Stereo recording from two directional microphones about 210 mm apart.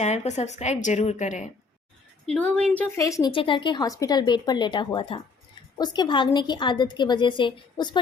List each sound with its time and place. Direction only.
0.0 s a woman's voice: 30° left (ahead or behind)
2.2 s a woman's voice: 5° left (ahead or behind); by 7.9 s 20° left (ahead or behind)